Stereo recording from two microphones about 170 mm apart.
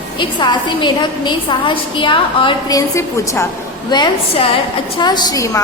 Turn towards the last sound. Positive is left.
turn(degrees=25)  # may be behind; listen again after turning